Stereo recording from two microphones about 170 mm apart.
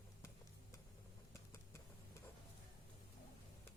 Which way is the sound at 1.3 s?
15° left (ahead or behind).